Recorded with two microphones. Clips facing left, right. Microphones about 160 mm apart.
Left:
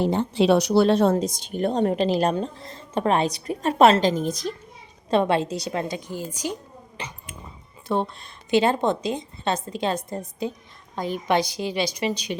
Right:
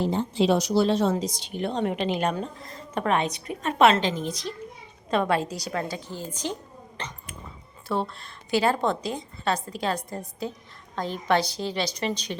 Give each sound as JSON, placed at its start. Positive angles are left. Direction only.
{"t": 0.0, "sound": "speech", "side_deg": 65}
{"t": 5.1, "sound": "a woman's voice", "side_deg": 25}